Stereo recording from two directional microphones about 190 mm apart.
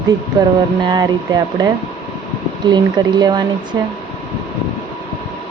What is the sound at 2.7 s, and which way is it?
Speech, 20° right (ahead or behind).